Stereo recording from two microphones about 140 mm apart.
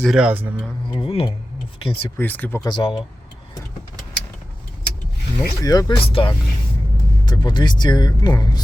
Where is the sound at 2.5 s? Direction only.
35° left (ahead or behind).